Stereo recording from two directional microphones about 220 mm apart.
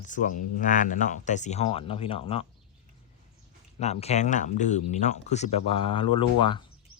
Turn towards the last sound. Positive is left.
turn(degrees=25)  # may be behind; listen again after turning